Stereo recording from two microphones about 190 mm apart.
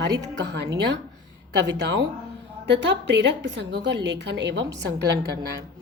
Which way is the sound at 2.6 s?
65° right (ahead or behind).